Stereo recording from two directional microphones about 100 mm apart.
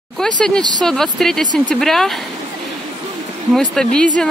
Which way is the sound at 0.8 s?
5° left (ahead or behind).